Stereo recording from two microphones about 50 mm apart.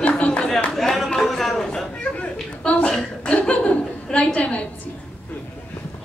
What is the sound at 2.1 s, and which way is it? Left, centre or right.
Chuckle, left.